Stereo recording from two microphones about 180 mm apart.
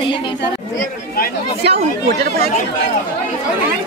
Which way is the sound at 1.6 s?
60° right (ahead or behind).